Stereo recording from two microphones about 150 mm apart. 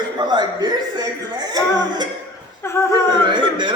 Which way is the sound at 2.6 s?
20° left (ahead or behind).